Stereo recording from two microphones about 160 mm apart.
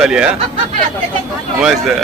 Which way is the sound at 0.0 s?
5° right (ahead or behind).